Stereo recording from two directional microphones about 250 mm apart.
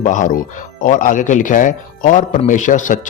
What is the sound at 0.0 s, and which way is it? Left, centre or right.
Speech, left.